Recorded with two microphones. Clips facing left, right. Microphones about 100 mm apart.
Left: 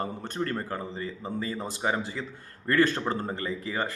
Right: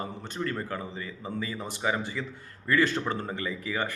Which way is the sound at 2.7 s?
45° left (ahead or behind).